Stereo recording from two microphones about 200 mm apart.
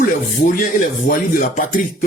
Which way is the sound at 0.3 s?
45° left (ahead or behind).